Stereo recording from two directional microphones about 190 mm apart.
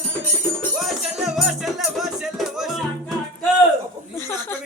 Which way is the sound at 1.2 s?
Centre (ahead or behind).